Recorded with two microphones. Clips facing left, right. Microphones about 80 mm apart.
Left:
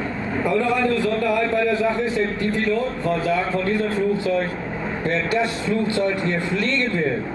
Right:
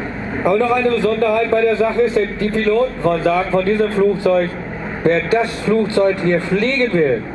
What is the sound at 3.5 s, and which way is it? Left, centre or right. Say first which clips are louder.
Speech: right 6 dB; right.